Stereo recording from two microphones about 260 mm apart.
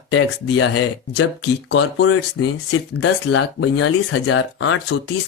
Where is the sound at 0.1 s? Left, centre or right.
Left.